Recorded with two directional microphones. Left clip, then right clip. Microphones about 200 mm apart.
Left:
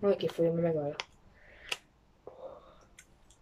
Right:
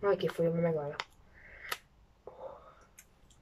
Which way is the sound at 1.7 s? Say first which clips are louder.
Left 2 dB; 10° left (ahead or behind).